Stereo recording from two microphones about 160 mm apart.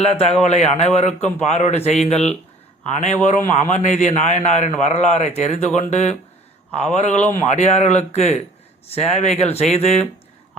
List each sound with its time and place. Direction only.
0.1 s a man's voice: 40° left (ahead or behind)